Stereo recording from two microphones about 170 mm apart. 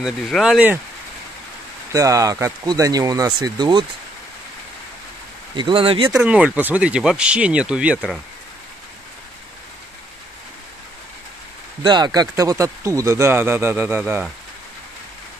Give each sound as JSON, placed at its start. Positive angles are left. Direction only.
{"t": 0.0, "sound": "speech", "side_deg": 0}
{"t": 1.9, "sound": "speech", "side_deg": -20}
{"t": 5.6, "sound": "speech", "side_deg": -30}
{"t": 6.1, "sound": "speech", "side_deg": -5}
{"t": 11.8, "sound": "speech", "side_deg": -25}